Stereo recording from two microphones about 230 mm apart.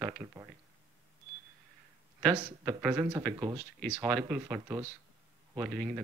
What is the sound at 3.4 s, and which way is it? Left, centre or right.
Speech, centre.